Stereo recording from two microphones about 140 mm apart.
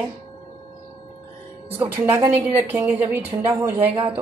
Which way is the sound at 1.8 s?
15° right (ahead or behind).